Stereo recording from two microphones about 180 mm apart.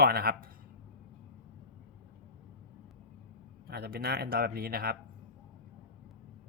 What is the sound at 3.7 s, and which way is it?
Speech, 60° right (ahead or behind).